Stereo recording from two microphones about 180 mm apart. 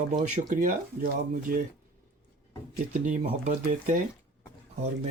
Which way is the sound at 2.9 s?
40° right (ahead or behind).